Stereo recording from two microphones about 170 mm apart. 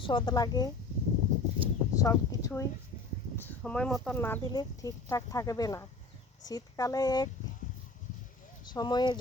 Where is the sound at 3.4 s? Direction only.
5° left (ahead or behind).